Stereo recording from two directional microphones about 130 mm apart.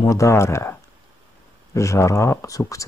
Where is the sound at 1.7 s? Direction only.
25° left (ahead or behind).